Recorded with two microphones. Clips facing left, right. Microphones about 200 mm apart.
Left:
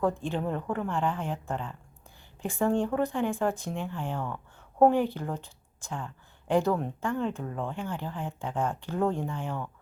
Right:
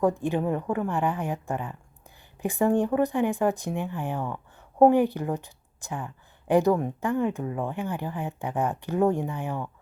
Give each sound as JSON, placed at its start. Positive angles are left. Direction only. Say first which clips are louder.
{"t": 0.0, "sound": "a woman's voice", "louder": "right 4 dB", "side_deg": -15}